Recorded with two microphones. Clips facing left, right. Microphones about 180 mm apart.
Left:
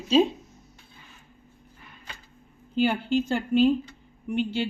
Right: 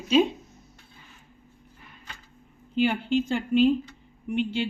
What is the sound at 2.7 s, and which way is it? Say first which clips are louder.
A woman's voice: even; 40° left (ahead or behind).